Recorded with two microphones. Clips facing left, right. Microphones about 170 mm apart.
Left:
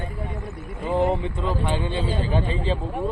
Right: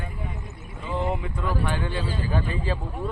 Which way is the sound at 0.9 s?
35° left (ahead or behind).